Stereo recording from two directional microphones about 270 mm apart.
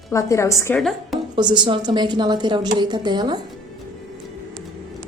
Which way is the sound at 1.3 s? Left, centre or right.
Centre.